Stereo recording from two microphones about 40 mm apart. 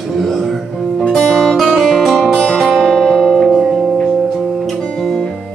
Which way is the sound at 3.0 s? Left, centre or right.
Centre.